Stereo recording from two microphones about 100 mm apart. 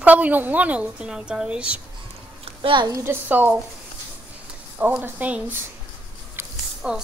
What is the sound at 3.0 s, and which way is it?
Speech, 20° right (ahead or behind).